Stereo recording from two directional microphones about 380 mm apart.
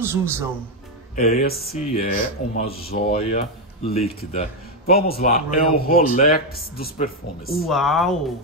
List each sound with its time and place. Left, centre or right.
0.0 s speech: centre
1.1 s speech: left
7.6 s speech: centre